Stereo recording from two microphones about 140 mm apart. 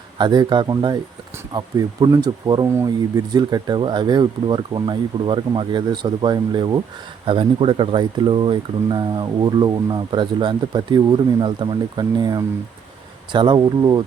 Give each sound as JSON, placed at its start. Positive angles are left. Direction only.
{"t": 0.2, "sound": "speech", "side_deg": -35}